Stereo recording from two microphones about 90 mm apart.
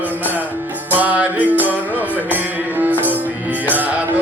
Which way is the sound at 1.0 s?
15° right (ahead or behind).